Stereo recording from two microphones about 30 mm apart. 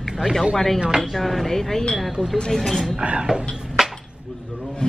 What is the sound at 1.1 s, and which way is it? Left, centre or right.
Speech, centre.